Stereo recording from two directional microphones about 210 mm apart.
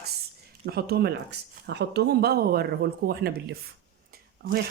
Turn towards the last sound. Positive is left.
turn(degrees=-45)  # may be behind; listen again after turning